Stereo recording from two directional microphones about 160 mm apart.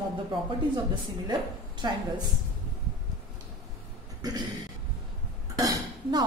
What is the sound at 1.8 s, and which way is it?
Speech, 25° right (ahead or behind).